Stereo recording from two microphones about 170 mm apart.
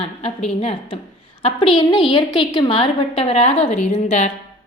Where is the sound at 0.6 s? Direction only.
35° left (ahead or behind).